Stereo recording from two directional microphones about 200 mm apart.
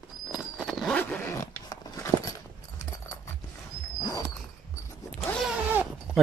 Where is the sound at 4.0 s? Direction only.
15° left (ahead or behind).